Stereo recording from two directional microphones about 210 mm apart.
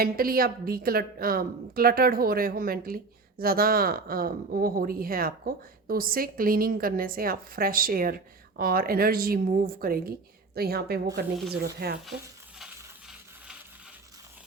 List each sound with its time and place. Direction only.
0.0 s a woman's voice: 45° right (ahead or behind)
12.5 s coin: 5° right (ahead or behind)